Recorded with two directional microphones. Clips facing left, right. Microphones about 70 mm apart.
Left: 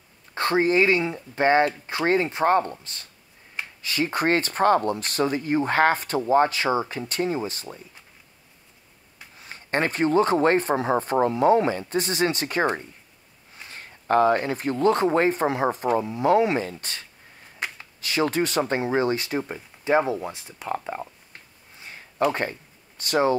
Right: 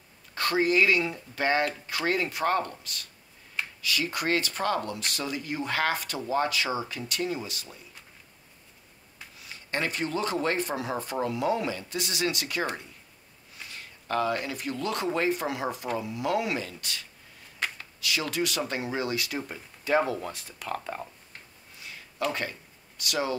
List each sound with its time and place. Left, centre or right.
0.3 s speech: left
9.4 s speech: left
18.0 s speech: left
21.7 s a sound: left